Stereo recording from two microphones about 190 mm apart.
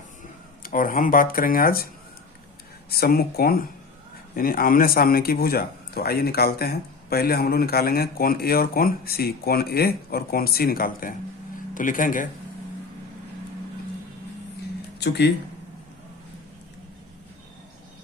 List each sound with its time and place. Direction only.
0.6 s a man's voice: 45° left (ahead or behind)
2.9 s a man's voice: 55° left (ahead or behind)
14.9 s speech: 60° left (ahead or behind)